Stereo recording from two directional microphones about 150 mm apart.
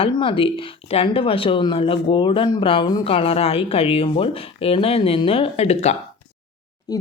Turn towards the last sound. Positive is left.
turn(degrees=25)  # may be behind; listen again after turning